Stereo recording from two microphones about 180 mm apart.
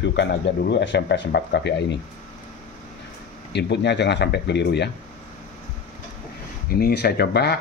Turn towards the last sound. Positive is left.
turn(degrees=65)  # may be behind; listen again after turning